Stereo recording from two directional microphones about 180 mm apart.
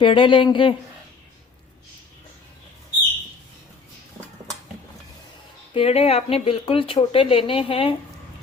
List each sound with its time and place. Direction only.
0.0 s speech: 30° left (ahead or behind)
5.7 s speech: 35° left (ahead or behind)